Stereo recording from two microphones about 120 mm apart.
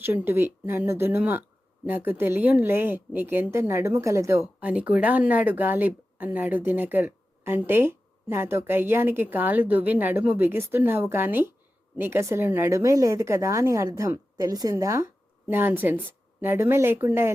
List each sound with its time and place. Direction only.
0.0 s a woman's voice: 15° right (ahead or behind)
15.4 s speech: 15° right (ahead or behind)